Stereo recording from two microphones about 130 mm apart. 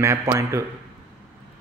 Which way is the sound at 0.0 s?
20° right (ahead or behind).